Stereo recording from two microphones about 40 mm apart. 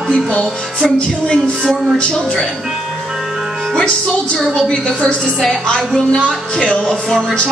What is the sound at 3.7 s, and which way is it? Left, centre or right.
Music, left.